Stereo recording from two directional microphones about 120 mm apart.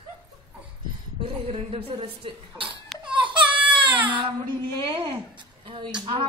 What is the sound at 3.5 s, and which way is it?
Baby cry, 15° right (ahead or behind).